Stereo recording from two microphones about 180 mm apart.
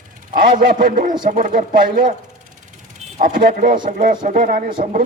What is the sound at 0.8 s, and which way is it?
A man's voice, 45° right (ahead or behind).